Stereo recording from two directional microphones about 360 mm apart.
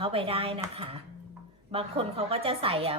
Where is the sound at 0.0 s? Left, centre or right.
Centre.